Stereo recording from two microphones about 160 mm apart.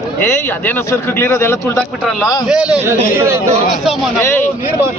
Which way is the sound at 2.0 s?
5° left (ahead or behind).